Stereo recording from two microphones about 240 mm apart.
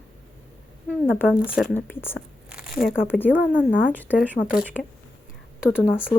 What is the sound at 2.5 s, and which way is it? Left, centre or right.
Crumpling, centre.